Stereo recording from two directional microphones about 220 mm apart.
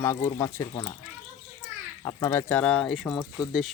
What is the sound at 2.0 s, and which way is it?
Speech, 10° left (ahead or behind).